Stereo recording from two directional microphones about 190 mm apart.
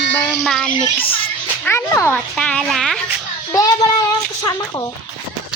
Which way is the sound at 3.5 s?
20° left (ahead or behind).